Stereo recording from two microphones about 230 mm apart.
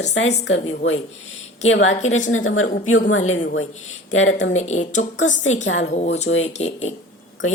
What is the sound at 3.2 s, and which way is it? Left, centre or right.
Speech, left.